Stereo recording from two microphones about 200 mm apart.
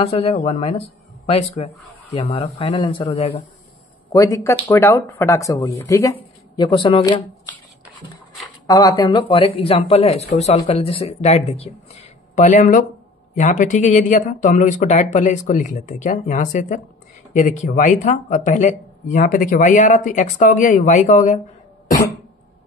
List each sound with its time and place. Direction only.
0.0 s speech: 30° left (ahead or behind)
4.1 s speech: 15° left (ahead or behind)
8.6 s speech: 20° left (ahead or behind); by 21.4 s 35° left (ahead or behind)